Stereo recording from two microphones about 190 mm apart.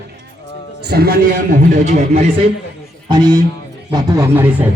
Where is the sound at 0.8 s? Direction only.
55° right (ahead or behind); by 2.2 s 35° right (ahead or behind).